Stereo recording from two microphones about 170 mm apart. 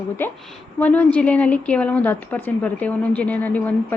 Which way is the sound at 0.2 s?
10° left (ahead or behind).